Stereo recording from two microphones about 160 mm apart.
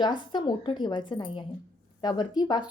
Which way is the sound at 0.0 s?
30° left (ahead or behind).